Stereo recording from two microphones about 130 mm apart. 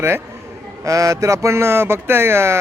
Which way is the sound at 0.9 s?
25° right (ahead or behind).